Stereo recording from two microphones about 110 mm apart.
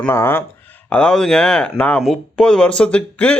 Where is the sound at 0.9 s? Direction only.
10° left (ahead or behind).